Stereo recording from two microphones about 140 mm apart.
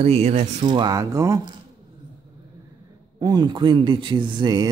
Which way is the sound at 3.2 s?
30° right (ahead or behind).